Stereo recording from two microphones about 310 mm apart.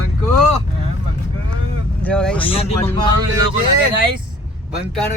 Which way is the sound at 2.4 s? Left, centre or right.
Centre.